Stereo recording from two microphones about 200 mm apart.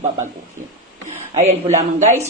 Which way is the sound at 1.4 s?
35° right (ahead or behind).